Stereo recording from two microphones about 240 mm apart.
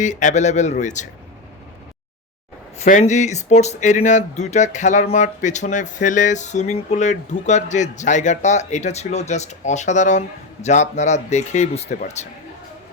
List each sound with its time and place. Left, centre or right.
0.0 s speech: left
2.7 s speech: left